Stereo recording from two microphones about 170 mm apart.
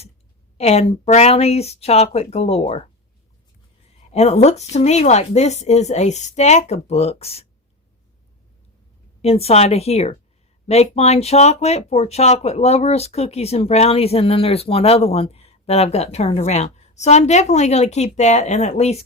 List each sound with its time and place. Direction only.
0.5 s speech: 35° left (ahead or behind)
4.1 s speech: 40° left (ahead or behind)
9.2 s speech: 35° left (ahead or behind)